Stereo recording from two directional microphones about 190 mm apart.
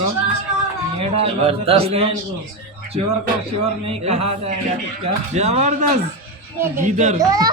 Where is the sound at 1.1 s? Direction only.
30° right (ahead or behind).